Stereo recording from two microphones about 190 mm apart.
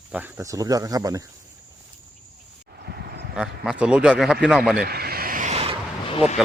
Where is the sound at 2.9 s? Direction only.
60° right (ahead or behind).